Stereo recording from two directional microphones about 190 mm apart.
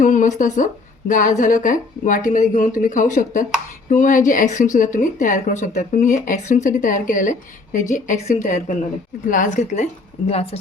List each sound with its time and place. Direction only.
0.0 s a woman's voice: 40° left (ahead or behind)